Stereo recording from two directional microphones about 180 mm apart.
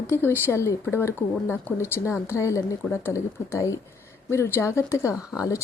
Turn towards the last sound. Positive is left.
turn(degrees=15)  # may be behind; listen again after turning